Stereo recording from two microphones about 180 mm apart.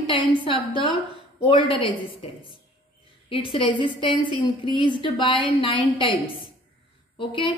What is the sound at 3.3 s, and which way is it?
A woman's voice, 30° left (ahead or behind).